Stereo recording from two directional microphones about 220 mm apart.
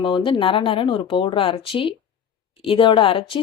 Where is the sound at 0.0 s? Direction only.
20° left (ahead or behind).